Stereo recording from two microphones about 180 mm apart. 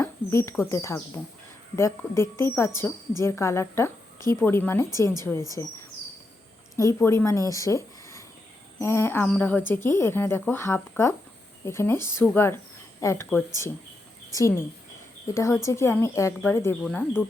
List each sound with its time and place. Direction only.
0.0 s a sound: 15° left (ahead or behind)
0.6 s speech: 15° left (ahead or behind)
6.7 s a woman's voice: 15° left (ahead or behind)
15.4 s speech: 15° left (ahead or behind)
16.8 s speech: 5° left (ahead or behind)